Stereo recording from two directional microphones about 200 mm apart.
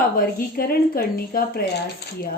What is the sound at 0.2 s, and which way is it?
A woman's voice, 45° left (ahead or behind).